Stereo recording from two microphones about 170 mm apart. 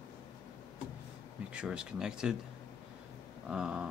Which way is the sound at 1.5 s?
5° right (ahead or behind).